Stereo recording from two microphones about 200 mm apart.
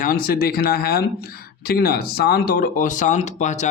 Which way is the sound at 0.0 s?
45° left (ahead or behind).